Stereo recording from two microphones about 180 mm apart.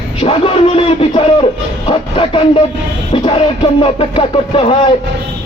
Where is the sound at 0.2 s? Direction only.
30° left (ahead or behind).